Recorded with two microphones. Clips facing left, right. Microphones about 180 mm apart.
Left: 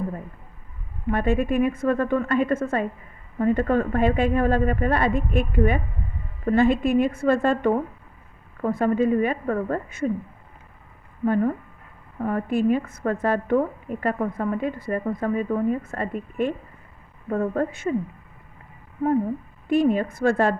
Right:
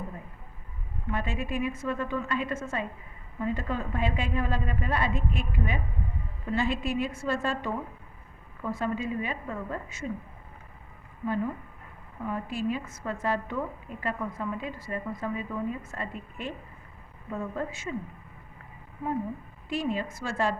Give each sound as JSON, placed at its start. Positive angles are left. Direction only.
{"t": 1.1, "sound": "a woman's voice", "side_deg": 55}
{"t": 12.2, "sound": "a woman's voice", "side_deg": 55}
{"t": 19.6, "sound": "a woman's voice", "side_deg": 55}